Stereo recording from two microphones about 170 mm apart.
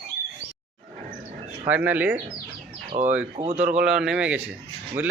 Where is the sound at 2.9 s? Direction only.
45° right (ahead or behind).